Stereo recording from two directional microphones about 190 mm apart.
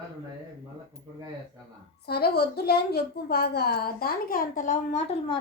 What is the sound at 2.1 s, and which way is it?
A woman's voice, 55° left (ahead or behind).